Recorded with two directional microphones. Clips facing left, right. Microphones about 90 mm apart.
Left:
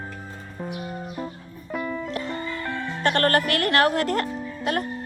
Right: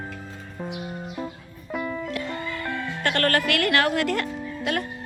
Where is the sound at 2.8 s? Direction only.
20° left (ahead or behind).